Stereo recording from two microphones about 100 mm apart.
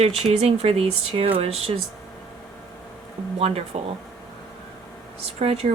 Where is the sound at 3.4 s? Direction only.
90° right.